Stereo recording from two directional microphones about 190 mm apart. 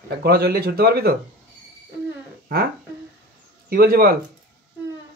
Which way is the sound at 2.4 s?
50° right (ahead or behind).